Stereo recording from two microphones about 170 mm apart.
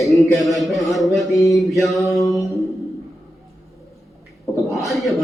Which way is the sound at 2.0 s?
20° left (ahead or behind).